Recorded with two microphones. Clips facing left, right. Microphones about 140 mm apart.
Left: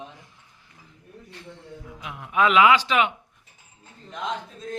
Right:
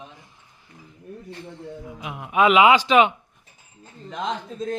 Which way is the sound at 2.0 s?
15° right (ahead or behind).